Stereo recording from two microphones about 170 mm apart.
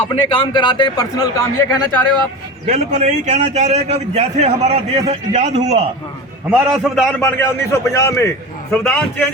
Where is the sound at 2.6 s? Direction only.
40° right (ahead or behind).